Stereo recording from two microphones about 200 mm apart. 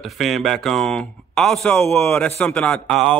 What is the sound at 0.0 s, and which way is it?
Speech, centre (ahead or behind).